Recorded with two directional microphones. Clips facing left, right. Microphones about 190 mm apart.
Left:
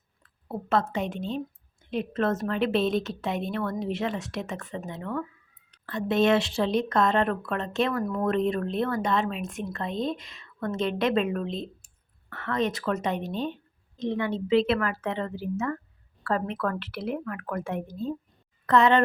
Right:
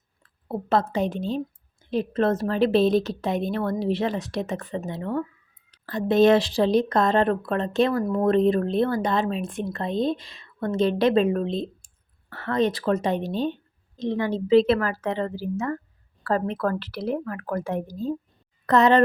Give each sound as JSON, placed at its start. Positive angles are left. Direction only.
{"t": 0.2, "sound": "a woman's voice", "side_deg": -35}